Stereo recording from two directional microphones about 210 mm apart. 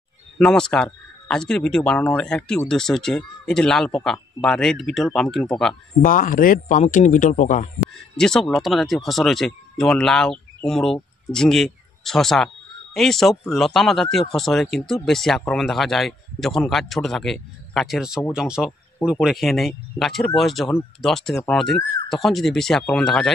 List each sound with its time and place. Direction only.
0.4 s speech: 5° left (ahead or behind)
6.0 s speech: 40° left (ahead or behind)
8.2 s speech: 5° left (ahead or behind)